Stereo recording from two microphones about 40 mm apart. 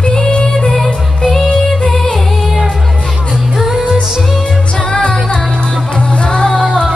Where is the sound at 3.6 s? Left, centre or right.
Centre.